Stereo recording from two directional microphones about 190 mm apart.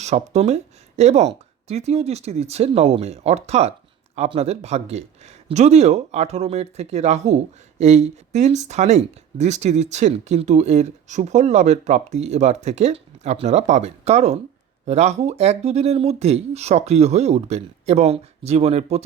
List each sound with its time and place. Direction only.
0.0 s speech: 35° right (ahead or behind)